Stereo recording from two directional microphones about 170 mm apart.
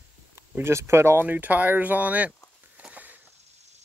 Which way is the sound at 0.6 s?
15° right (ahead or behind).